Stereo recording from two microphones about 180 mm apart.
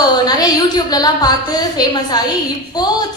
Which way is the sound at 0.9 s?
20° left (ahead or behind).